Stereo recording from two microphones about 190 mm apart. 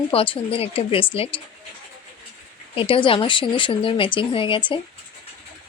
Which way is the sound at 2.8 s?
30° left (ahead or behind).